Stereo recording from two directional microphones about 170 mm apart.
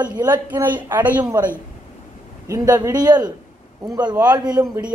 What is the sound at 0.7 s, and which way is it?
A man's voice, 10° right (ahead or behind).